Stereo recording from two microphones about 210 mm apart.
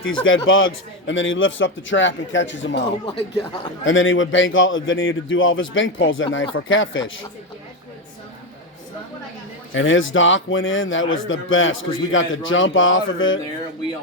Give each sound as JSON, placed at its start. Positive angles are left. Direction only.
{"t": 0.0, "sound": "a man's voice", "side_deg": 70}
{"t": 3.8, "sound": "a man's voice", "side_deg": 65}
{"t": 9.7, "sound": "a man's voice", "side_deg": 65}